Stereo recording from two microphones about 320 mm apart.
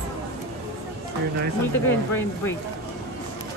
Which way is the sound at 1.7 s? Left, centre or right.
Centre.